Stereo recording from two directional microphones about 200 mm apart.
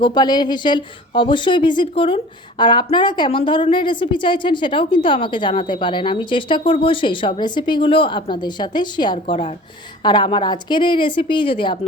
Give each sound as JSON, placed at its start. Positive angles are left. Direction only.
{"t": 0.0, "sound": "speech", "side_deg": 20}